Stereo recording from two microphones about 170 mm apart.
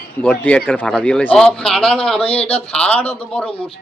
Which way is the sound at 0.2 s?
10° left (ahead or behind).